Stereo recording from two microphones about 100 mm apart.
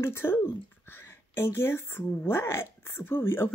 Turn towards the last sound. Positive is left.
turn(degrees=25)  # may be behind; listen again after turning